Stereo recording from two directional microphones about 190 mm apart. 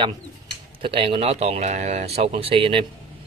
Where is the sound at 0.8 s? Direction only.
30° right (ahead or behind).